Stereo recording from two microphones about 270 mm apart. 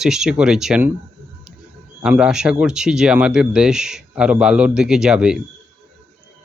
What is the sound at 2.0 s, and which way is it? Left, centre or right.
Speech, centre.